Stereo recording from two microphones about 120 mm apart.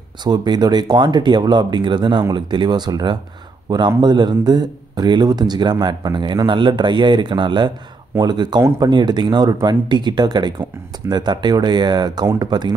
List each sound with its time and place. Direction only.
0.2 s speech: 35° right (ahead or behind)